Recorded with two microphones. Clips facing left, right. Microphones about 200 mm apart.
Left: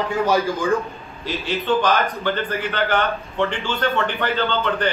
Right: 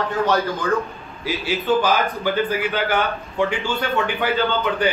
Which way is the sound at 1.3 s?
5° right (ahead or behind).